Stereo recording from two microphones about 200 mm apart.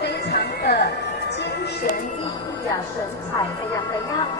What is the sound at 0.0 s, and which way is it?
Music, 55° left (ahead or behind).